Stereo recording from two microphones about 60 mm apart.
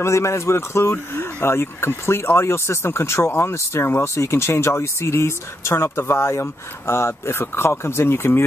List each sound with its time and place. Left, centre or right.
0.0 s speech: left